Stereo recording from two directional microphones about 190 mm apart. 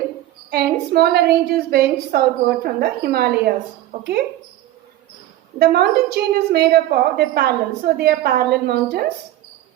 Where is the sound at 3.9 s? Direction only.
40° right (ahead or behind).